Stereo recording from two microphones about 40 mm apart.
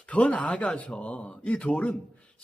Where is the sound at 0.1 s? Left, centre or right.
Left.